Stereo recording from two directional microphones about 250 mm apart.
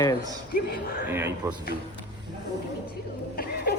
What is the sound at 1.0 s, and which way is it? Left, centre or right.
Speech, centre.